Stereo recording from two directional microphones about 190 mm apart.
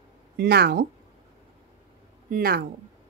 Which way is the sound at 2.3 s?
55° right (ahead or behind).